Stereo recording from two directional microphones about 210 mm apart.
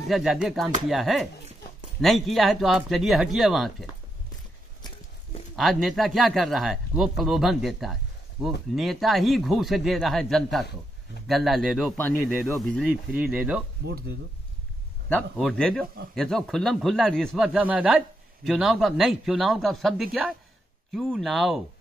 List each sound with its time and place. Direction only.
0.1 s speech: centre (ahead or behind)
5.6 s speech: centre (ahead or behind)
13.8 s speech: 50° right (ahead or behind)
15.0 s speech: 5° left (ahead or behind)